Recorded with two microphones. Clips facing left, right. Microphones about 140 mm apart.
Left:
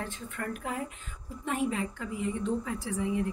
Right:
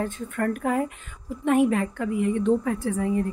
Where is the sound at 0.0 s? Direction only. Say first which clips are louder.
Right 10 dB; 50° right (ahead or behind).